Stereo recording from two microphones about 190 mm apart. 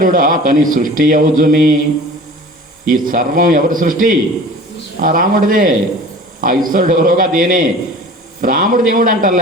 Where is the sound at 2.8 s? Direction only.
45° right (ahead or behind).